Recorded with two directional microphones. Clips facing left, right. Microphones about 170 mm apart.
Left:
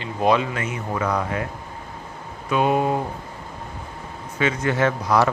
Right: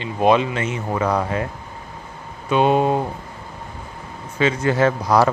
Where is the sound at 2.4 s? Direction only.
25° right (ahead or behind).